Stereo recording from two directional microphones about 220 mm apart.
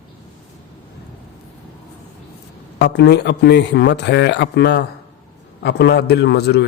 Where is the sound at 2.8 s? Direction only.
50° left (ahead or behind).